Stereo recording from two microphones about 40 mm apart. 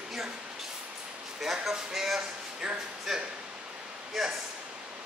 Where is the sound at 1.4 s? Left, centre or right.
Centre.